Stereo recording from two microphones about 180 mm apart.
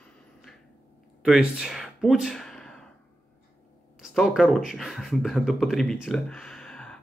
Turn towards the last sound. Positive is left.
turn(degrees=5)  # may be behind; listen again after turning